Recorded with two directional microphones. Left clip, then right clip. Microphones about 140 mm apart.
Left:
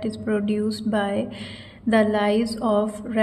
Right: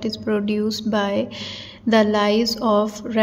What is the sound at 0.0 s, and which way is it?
A woman's voice, 15° right (ahead or behind).